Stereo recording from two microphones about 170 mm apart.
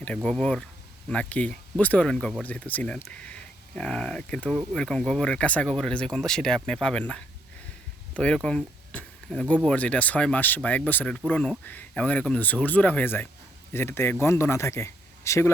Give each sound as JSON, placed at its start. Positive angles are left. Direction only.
{"t": 0.0, "sound": "speech", "side_deg": 5}